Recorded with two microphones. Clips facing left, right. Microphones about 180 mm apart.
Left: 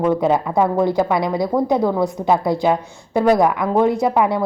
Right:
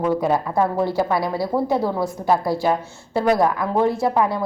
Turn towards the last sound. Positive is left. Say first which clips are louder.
# left 3 dB
turn(degrees=20)  # may be behind; listen again after turning